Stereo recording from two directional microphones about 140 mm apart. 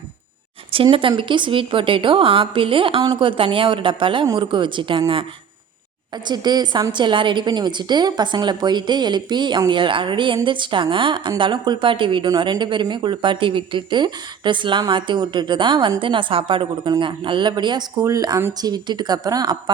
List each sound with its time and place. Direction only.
0.7 s a woman's voice: 40° right (ahead or behind)
6.2 s a woman's voice: 30° right (ahead or behind)